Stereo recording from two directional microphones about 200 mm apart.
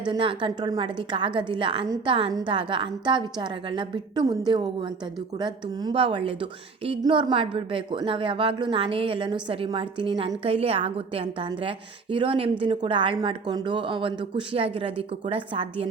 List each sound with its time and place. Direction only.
0.1 s a woman's voice: 25° right (ahead or behind)